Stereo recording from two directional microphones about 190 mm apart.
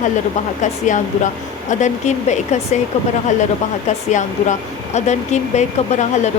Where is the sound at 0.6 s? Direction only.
40° left (ahead or behind).